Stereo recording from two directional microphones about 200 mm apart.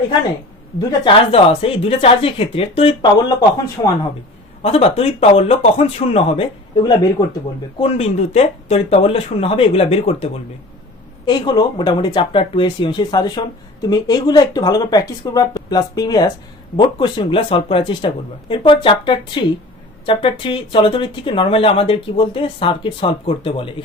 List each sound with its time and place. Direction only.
0.8 s speech: 20° left (ahead or behind)
4.6 s speech: 30° left (ahead or behind)